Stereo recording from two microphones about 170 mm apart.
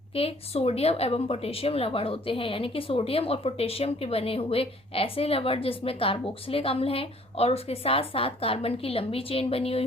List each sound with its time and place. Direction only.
0.1 s a woman's voice: 35° left (ahead or behind)